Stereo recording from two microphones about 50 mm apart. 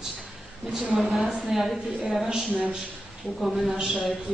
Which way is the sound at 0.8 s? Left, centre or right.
Centre.